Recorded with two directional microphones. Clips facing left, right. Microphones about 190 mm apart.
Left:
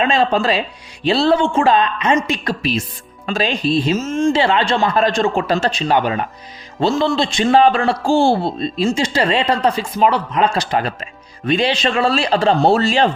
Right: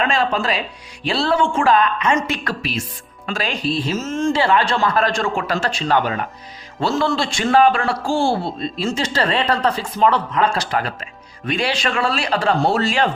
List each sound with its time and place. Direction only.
0.0 s speech: 20° left (ahead or behind)